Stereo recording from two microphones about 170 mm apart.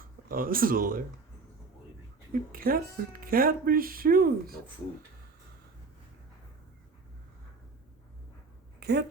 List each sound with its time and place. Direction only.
0.3 s speech: 55° right (ahead or behind)
2.3 s speech: 55° right (ahead or behind)
8.8 s speech: 80° right